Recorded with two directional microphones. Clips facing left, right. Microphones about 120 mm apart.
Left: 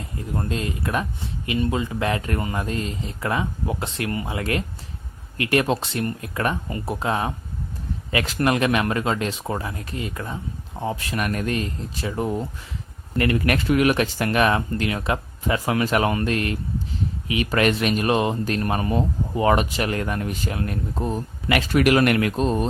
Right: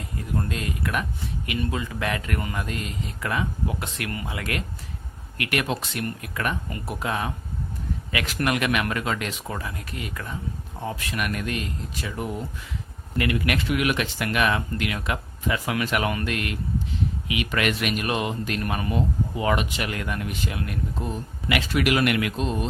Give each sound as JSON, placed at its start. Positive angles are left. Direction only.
{"t": 0.0, "sound": "speech", "side_deg": 25}